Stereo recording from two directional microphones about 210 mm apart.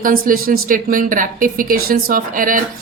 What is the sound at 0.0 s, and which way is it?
A woman's voice, 45° right (ahead or behind).